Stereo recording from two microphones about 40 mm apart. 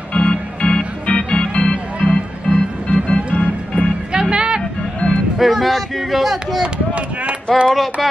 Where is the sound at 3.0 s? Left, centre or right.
Left.